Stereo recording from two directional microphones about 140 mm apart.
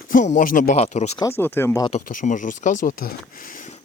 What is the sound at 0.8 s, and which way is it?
Speech, 50° left (ahead or behind).